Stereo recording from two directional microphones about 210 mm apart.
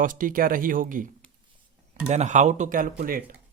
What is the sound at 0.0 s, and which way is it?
Speech, 40° right (ahead or behind).